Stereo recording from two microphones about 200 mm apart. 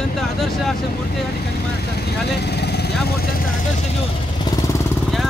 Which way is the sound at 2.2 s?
55° left (ahead or behind).